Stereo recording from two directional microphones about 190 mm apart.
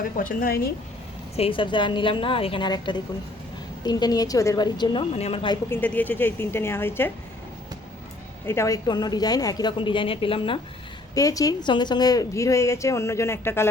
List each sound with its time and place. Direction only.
0.0 s a woman's voice: 45° left (ahead or behind)
1.4 s a woman's voice: 25° left (ahead or behind)
5.6 s a woman's voice: 10° left (ahead or behind)
8.4 s a woman's voice: 15° left (ahead or behind)